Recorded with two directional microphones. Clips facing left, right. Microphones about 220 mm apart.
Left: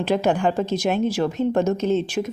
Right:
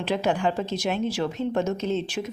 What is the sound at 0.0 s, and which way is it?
A woman's voice, 45° left (ahead or behind).